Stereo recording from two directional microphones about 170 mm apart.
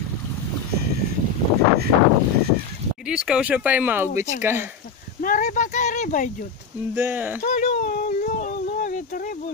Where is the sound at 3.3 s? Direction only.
5° right (ahead or behind).